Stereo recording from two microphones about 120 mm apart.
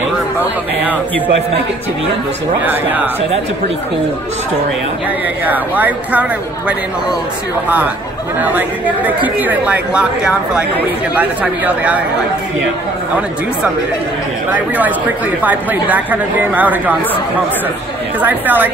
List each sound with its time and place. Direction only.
2.6 s a woman's voice: 15° right (ahead or behind)
5.4 s a woman's voice: 15° right (ahead or behind)
7.6 s a woman's voice: 15° right (ahead or behind)
14.5 s a woman's voice: 15° right (ahead or behind)
18.2 s a woman's voice: 15° right (ahead or behind)